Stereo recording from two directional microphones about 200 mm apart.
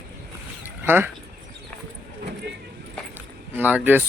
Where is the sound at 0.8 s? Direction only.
10° right (ahead or behind).